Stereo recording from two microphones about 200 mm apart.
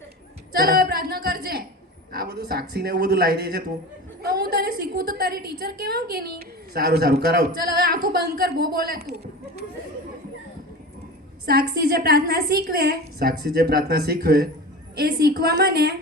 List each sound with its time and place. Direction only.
0.5 s a sound: 50° right (ahead or behind)
2.1 s a woman's voice: 55° right (ahead or behind)
11.4 s a woman's voice: 50° right (ahead or behind)